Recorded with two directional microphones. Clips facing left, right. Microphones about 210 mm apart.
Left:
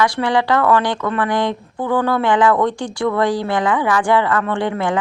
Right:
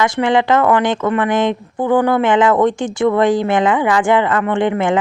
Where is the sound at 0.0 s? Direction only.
20° right (ahead or behind).